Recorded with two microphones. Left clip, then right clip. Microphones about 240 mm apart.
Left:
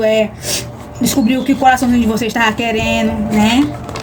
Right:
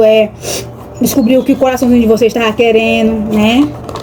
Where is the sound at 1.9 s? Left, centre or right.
Left.